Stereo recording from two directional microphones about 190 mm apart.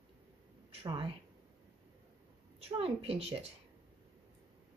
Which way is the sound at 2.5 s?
30° right (ahead or behind).